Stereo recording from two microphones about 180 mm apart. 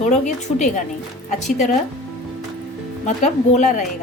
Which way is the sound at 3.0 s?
40° left (ahead or behind).